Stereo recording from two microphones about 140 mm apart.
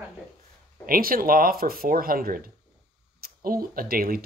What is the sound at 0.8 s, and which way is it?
Speech, 90° right.